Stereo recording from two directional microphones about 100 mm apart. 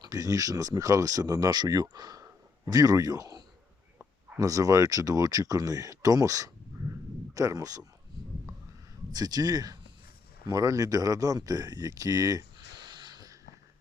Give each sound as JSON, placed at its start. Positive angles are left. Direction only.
{"t": 0.0, "sound": "speech", "side_deg": -40}
{"t": 9.1, "sound": "speech", "side_deg": -40}
{"t": 12.9, "sound": "a sound", "side_deg": -45}